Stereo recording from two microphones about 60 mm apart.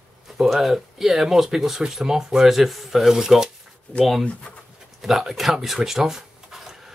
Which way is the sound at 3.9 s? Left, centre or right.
Centre.